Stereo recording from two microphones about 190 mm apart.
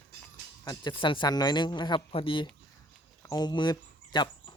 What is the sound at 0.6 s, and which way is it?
A man's voice, 20° left (ahead or behind).